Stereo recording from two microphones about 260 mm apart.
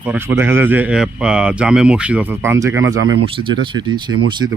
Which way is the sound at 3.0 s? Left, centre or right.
Right.